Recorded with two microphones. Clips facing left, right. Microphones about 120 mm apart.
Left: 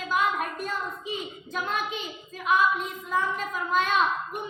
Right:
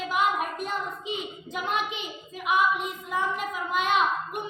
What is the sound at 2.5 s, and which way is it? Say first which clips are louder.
A woman's voice: left 1 dB; 15° right (ahead or behind).